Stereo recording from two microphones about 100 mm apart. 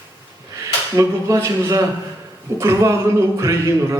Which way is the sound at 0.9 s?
30° right (ahead or behind).